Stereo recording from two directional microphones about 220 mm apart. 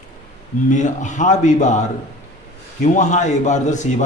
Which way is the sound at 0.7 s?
35° left (ahead or behind).